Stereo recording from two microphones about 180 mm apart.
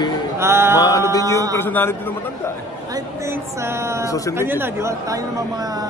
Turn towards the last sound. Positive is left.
turn(degrees=-15)  # may be behind; listen again after turning